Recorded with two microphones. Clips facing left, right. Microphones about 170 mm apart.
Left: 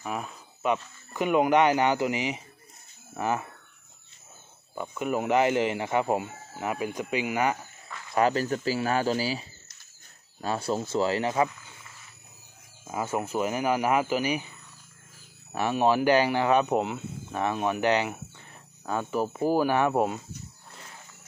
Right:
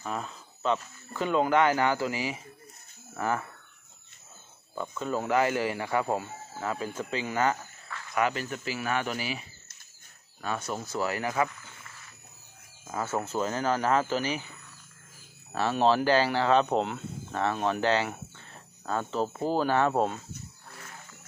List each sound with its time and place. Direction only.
0.0 s speech: 10° left (ahead or behind)
4.7 s speech: 15° left (ahead or behind)
8.1 s speech: 35° left (ahead or behind)
12.8 s speech: 15° left (ahead or behind)
15.5 s speech: 15° left (ahead or behind)
16.6 s speech: 5° left (ahead or behind)